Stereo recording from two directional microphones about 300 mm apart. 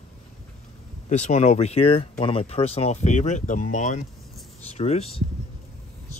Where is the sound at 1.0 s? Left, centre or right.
Left.